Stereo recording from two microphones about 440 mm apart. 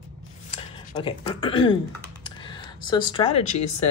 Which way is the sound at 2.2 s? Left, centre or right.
Centre.